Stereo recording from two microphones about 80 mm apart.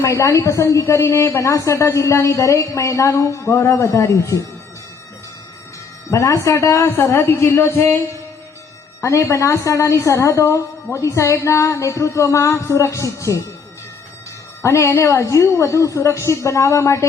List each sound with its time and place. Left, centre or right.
0.0 s a woman's voice: left
6.1 s a woman's voice: left
9.0 s a woman's voice: left
14.6 s a woman's voice: left